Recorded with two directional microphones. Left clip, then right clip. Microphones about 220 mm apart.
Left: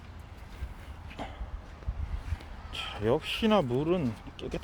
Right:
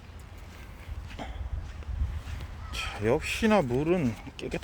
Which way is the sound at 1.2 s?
5° right (ahead or behind).